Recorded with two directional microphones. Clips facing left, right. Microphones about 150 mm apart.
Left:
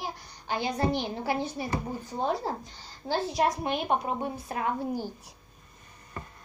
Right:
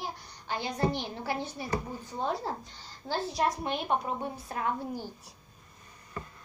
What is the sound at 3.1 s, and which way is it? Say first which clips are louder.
A woman's voice: left 3 dB; 15° left (ahead or behind).